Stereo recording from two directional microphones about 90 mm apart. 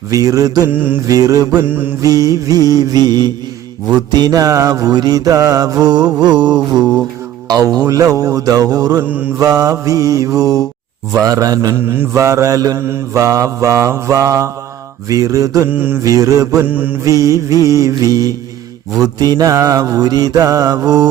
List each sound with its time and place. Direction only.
0.1 s mantra: 40° right (ahead or behind)
0.7 s mantra: 20° right (ahead or behind)
1.0 s mantra: 40° right (ahead or behind)
9.0 s mantra: 20° right (ahead or behind)
9.4 s mantra: 40° right (ahead or behind)
11.8 s mantra: 25° right (ahead or behind)
15.7 s mantra: 25° right (ahead or behind)
16.0 s mantra: 40° right (ahead or behind)
16.6 s mantra: 20° right (ahead or behind)
17.0 s mantra: 40° right (ahead or behind)